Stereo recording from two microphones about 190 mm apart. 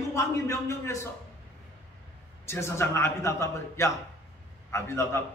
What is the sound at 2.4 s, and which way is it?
A man's voice, 15° left (ahead or behind).